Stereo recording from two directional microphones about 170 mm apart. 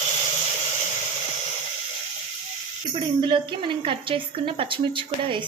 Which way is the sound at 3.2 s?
30° right (ahead or behind).